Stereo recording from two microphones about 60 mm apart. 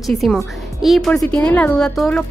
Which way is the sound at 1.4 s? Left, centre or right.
Left.